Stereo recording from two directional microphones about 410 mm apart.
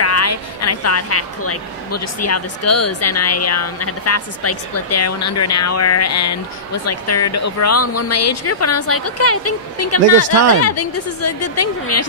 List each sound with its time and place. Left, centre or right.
0.0 s a woman's voice: left